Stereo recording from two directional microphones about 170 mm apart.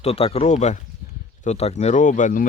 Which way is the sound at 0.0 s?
35° left (ahead or behind).